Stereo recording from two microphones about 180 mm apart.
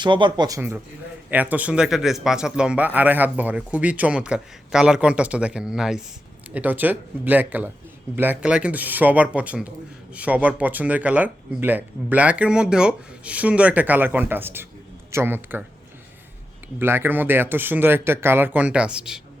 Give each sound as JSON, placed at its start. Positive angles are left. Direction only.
{"t": 0.0, "sound": "a man's voice", "side_deg": -25}
{"t": 16.7, "sound": "a man's voice", "side_deg": -15}